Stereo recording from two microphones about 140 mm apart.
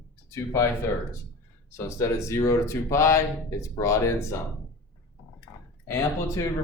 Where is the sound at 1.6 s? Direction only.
20° left (ahead or behind).